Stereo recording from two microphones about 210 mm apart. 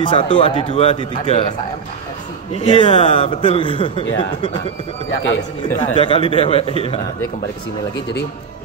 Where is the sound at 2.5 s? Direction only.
25° left (ahead or behind).